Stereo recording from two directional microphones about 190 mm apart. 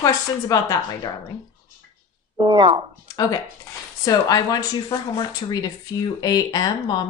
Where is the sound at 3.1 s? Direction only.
20° left (ahead or behind).